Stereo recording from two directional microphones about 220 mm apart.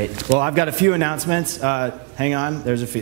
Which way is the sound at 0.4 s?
15° right (ahead or behind).